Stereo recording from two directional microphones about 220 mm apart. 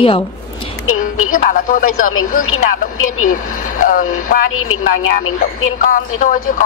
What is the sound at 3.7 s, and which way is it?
Speech, 40° left (ahead or behind).